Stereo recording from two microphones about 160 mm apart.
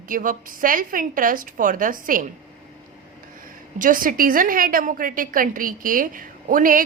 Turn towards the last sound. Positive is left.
turn(degrees=-60)  # may be behind; listen again after turning